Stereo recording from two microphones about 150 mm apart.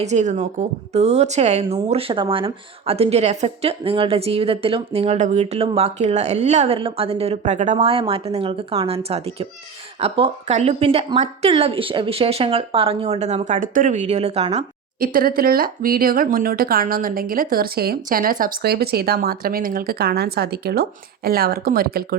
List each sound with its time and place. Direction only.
0.0 s speech: 50° right (ahead or behind)
6.7 s speech: 40° right (ahead or behind)
14.9 s speech: 75° right (ahead or behind)